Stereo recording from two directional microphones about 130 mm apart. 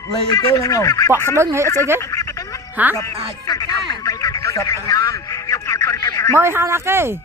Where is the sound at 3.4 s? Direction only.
30° left (ahead or behind).